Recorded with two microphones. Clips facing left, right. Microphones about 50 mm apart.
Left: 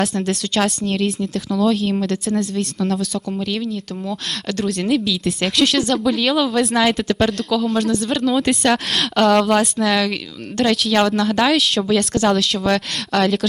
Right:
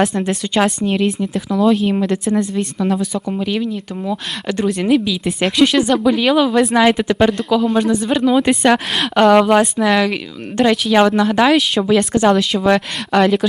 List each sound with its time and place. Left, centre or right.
0.0 s speech: centre